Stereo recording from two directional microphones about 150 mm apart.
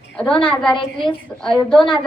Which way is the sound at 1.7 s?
30° left (ahead or behind).